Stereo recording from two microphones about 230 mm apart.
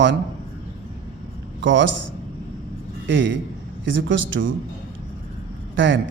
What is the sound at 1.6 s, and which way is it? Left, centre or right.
Speech, right.